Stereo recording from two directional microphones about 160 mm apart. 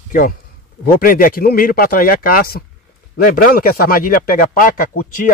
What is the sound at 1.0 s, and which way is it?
Speech, 60° left (ahead or behind).